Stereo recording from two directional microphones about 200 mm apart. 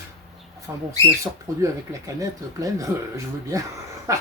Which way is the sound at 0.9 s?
15° right (ahead or behind).